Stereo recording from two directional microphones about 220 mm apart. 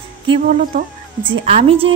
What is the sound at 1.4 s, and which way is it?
Speech, 25° right (ahead or behind).